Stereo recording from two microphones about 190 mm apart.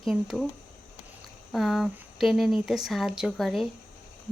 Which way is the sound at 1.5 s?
Centre (ahead or behind).